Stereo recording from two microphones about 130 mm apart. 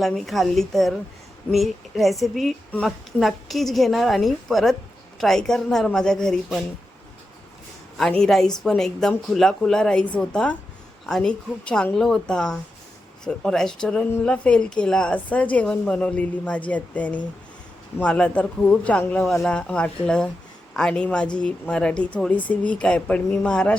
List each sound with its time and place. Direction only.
0.0 s a woman's voice: centre (ahead or behind)
7.9 s a woman's voice: 5° left (ahead or behind)